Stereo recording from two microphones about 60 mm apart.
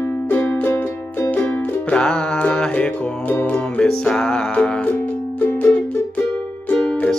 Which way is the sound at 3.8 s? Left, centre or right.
Centre.